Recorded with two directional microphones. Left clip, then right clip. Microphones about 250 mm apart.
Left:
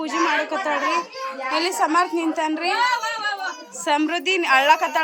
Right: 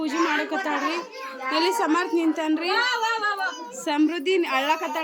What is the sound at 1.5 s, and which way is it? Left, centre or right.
A woman's voice, centre.